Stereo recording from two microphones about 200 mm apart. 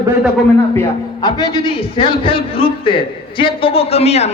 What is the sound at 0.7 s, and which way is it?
A man's voice, 20° left (ahead or behind).